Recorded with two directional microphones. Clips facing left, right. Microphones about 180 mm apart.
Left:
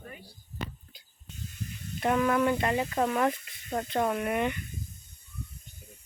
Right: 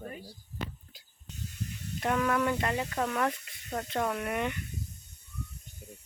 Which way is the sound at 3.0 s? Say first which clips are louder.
Left 4 dB; 25° left (ahead or behind).